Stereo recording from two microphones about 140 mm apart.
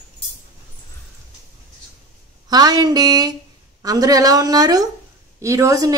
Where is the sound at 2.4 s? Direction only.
30° right (ahead or behind).